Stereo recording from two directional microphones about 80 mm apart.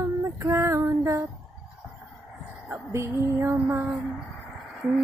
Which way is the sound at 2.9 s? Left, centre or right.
Right.